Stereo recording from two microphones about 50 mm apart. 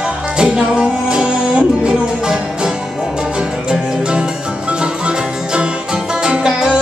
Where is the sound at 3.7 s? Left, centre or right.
Centre.